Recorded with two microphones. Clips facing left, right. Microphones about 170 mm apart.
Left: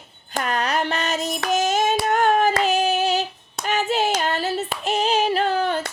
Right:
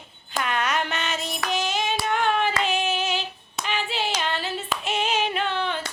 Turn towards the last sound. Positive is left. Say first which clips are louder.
# left 6 dB
turn(degrees=40)  # may be behind; listen again after turning